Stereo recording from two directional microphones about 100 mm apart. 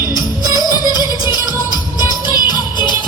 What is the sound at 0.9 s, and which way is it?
Music, 45° left (ahead or behind).